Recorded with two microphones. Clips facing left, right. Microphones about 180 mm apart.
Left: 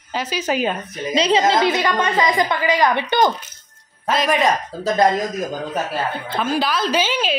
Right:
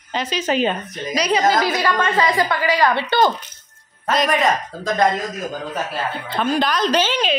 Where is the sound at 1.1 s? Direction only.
25° left (ahead or behind).